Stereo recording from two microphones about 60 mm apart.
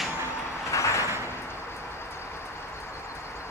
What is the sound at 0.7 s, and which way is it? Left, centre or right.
Vehicle, left.